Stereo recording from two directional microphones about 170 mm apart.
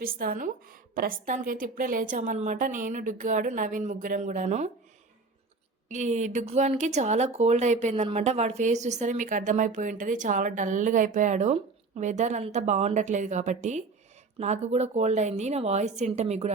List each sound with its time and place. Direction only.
0.0 s a woman's voice: 55° right (ahead or behind)
5.9 s speech: 45° right (ahead or behind)